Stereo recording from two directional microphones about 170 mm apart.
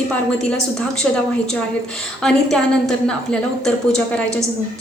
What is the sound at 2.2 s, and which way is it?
A woman's voice, 5° left (ahead or behind).